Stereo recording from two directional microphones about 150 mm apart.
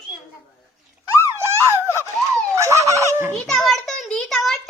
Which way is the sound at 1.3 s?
15° right (ahead or behind).